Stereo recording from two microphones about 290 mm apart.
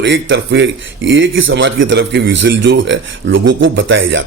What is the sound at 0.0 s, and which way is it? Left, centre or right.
Speech, right.